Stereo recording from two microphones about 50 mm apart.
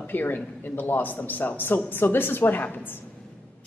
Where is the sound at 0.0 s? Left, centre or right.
Left.